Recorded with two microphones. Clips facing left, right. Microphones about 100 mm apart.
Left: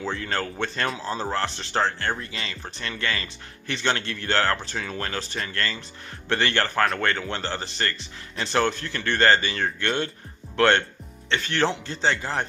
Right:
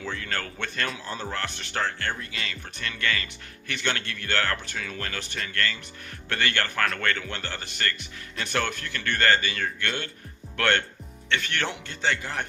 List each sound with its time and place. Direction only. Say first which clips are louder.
0.0 s speech: left 4 dB; 30° left (ahead or behind)